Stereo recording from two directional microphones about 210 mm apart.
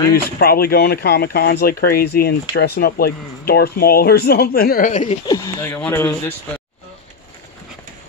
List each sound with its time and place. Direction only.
0.1 s speech: 45° left (ahead or behind)
5.2 s speech: 15° left (ahead or behind)